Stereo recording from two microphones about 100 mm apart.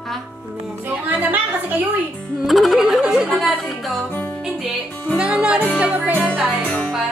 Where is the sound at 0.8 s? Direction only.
15° right (ahead or behind).